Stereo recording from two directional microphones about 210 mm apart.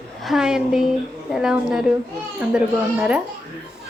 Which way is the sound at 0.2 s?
Centre (ahead or behind).